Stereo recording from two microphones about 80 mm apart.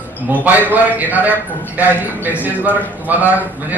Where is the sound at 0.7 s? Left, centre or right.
Right.